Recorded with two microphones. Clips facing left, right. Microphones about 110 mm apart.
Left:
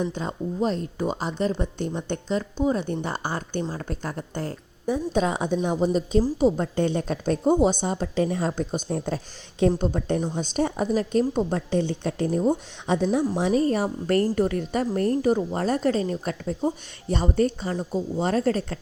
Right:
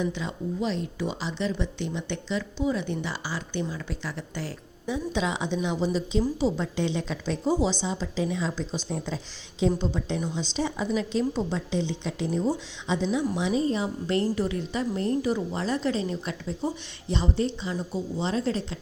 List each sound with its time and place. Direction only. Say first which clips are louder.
0.0 s a woman's voice: left 2 dB; 45° left (ahead or behind)